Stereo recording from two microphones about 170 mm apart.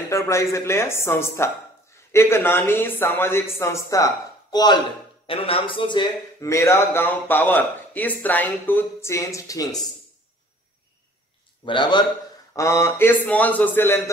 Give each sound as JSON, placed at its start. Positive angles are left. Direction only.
{"t": 0.1, "sound": "speech", "side_deg": 15}
{"t": 11.6, "sound": "a man's voice", "side_deg": 30}
{"t": 12.5, "sound": "speech", "side_deg": 15}